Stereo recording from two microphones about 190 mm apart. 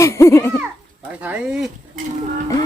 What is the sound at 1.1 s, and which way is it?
Speech, 10° right (ahead or behind).